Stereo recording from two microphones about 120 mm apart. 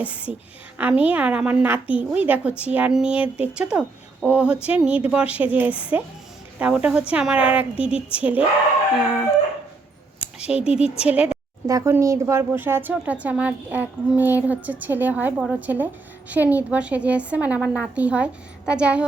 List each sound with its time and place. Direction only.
0.0 s speech: 10° right (ahead or behind)
10.2 s a sound: 10° right (ahead or behind)
10.8 s speech: 10° right (ahead or behind)
11.6 s speech: 25° right (ahead or behind)